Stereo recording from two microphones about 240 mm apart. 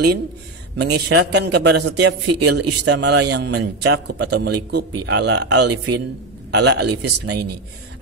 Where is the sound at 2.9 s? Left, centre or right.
Right.